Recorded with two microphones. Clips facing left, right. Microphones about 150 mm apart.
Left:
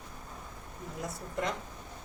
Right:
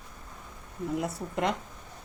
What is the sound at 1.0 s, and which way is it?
Speech, 65° right (ahead or behind).